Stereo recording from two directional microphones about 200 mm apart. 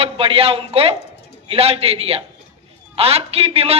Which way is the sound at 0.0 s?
30° right (ahead or behind).